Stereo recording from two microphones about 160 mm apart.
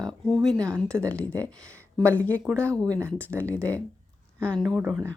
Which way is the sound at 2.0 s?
10° left (ahead or behind).